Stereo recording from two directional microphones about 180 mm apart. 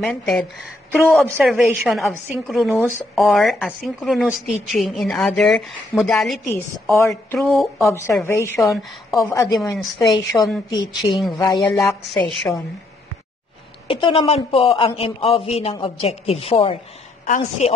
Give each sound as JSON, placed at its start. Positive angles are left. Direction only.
{"t": 0.0, "sound": "a woman's voice", "side_deg": 5}
{"t": 7.9, "sound": "a woman's voice", "side_deg": 15}
{"t": 9.8, "sound": "a woman's voice", "side_deg": 0}
{"t": 10.1, "sound": "a woman's voice", "side_deg": 20}
{"t": 13.8, "sound": "a woman's voice", "side_deg": 30}